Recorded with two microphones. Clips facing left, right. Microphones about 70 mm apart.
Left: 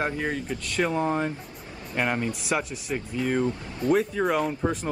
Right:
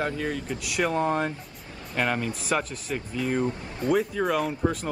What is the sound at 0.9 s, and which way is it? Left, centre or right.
Speech, centre.